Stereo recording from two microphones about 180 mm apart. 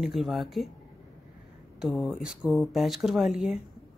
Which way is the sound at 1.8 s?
Centre (ahead or behind).